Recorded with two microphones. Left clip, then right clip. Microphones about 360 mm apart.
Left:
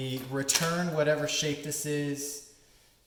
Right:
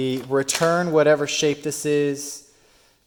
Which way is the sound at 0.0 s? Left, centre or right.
Right.